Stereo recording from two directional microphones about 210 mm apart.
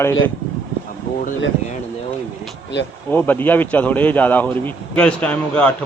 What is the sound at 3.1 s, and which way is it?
A man's voice, 10° left (ahead or behind).